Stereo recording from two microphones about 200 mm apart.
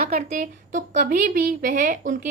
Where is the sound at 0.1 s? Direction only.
35° right (ahead or behind).